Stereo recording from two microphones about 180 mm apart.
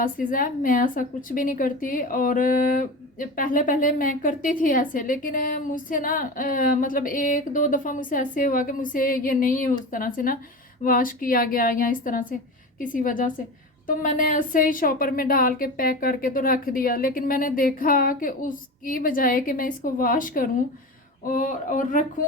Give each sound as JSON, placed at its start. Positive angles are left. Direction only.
{"t": 0.0, "sound": "a woman's voice", "side_deg": 50}